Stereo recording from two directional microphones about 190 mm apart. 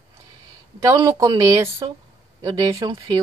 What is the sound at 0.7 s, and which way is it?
A woman's voice, 20° right (ahead or behind).